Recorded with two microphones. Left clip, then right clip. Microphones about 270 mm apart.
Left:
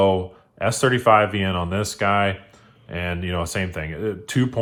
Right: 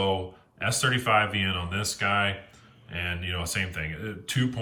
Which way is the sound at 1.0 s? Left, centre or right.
Centre.